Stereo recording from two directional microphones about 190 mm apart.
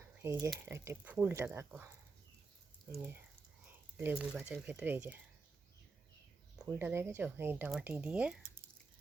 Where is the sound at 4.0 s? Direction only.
10° right (ahead or behind).